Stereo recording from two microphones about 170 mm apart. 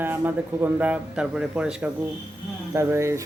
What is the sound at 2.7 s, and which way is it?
Speech, 15° right (ahead or behind).